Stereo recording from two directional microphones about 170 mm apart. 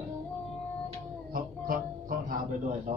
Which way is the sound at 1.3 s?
55° right (ahead or behind).